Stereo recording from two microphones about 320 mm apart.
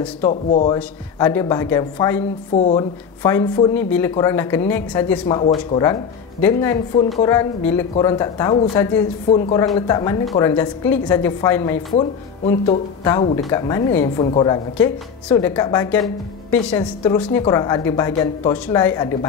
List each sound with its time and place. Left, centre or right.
0.2 s a woman's voice: left